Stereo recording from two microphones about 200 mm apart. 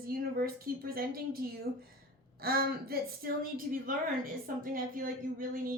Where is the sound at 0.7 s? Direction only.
45° right (ahead or behind).